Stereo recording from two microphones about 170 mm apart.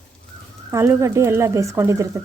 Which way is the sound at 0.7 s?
15° right (ahead or behind).